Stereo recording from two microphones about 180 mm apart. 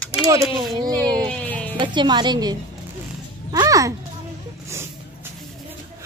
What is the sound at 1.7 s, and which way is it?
Speech, 25° right (ahead or behind).